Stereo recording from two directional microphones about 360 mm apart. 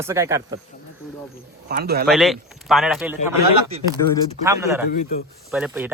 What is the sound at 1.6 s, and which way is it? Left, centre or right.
Speech, right.